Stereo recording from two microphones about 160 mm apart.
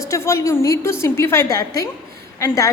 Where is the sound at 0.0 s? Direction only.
20° left (ahead or behind).